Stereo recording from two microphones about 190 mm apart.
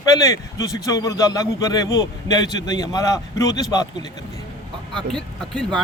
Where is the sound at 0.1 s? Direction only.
15° left (ahead or behind).